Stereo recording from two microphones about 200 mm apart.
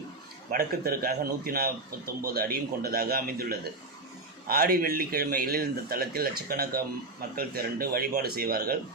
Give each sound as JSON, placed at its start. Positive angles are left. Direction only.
{"t": 0.5, "sound": "speech", "side_deg": -50}